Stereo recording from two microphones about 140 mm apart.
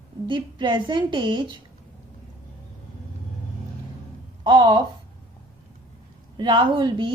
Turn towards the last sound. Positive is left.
turn(degrees=-35)  # may be behind; listen again after turning